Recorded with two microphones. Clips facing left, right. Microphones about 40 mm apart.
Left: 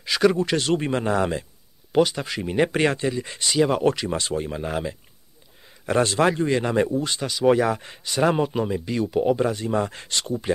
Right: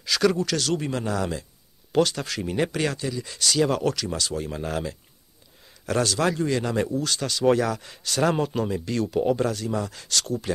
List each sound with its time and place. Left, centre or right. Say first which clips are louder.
0.0 s speech: left 2 dB; centre
1.9 s speech: left 2 dB; centre
2.7 s speech: left 5 dB; left
4.5 s speech: left 2 dB; centre
5.9 s speech: left 4 dB; left
7.7 s speech: left 3 dB; left
8.0 s speech: left 2 dB; centre
9.5 s speech: left 4 dB; left